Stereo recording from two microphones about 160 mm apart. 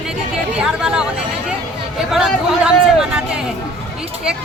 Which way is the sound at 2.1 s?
Centre (ahead or behind).